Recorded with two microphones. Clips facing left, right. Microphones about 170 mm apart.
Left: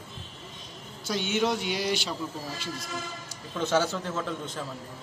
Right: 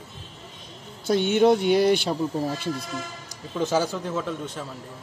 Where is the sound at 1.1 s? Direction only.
55° right (ahead or behind).